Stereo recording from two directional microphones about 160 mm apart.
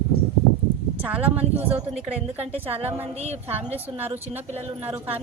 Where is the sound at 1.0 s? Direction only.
10° right (ahead or behind).